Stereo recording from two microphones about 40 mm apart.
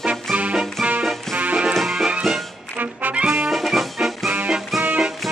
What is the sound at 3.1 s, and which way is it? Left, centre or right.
Music, right.